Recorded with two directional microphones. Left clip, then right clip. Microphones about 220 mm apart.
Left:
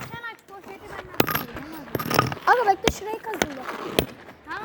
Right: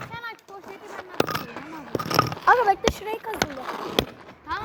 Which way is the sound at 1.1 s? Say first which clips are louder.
Left 1 dB; 20° left (ahead or behind).